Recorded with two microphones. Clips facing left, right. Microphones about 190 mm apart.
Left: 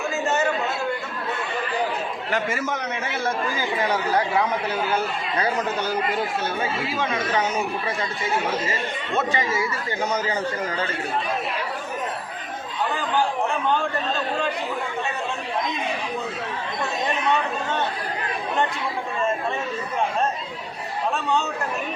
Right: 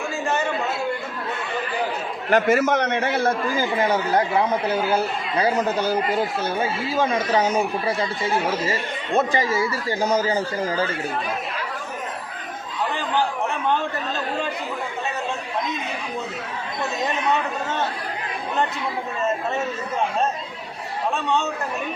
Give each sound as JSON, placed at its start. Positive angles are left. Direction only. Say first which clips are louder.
{"t": 2.3, "sound": "a man's voice", "louder": "right 9 dB", "side_deg": -65}
{"t": 3.8, "sound": "speech", "louder": "right 1 dB", "side_deg": -25}
{"t": 9.1, "sound": "speech", "louder": "right 4 dB", "side_deg": -35}